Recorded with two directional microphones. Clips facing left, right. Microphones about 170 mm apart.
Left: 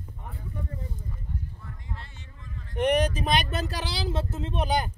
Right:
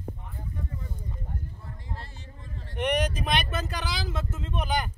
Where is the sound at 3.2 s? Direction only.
35° left (ahead or behind).